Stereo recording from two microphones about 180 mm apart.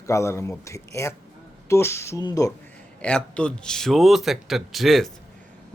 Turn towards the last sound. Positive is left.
turn(degrees=0)  # may be behind; listen again after turning